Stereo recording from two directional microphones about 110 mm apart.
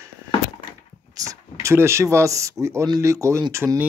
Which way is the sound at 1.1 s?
30° right (ahead or behind).